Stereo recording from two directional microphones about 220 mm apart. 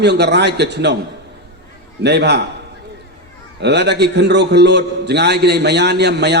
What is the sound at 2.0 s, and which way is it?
Speech, 50° right (ahead or behind).